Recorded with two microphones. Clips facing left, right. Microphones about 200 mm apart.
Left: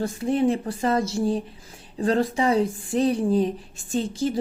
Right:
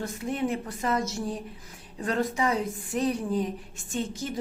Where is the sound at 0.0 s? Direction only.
30° left (ahead or behind).